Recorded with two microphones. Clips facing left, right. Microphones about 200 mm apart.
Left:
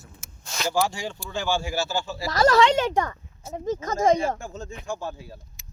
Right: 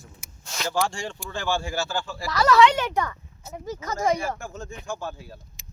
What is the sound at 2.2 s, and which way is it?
Speech, 45° left (ahead or behind).